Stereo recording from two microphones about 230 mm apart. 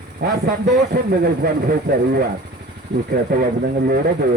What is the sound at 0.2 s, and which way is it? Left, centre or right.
A man's voice, right.